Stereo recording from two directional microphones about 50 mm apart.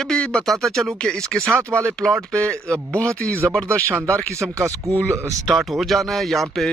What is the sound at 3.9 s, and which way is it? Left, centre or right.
Speech, right.